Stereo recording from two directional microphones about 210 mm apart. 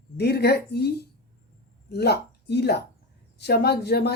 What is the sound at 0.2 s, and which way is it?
Speech, 50° left (ahead or behind).